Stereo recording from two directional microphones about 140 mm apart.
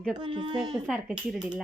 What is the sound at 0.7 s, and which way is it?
Speech, centre (ahead or behind).